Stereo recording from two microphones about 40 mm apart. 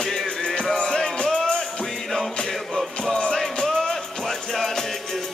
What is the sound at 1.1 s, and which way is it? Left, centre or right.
Music, left.